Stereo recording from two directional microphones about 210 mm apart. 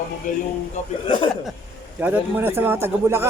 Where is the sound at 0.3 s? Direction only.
40° left (ahead or behind).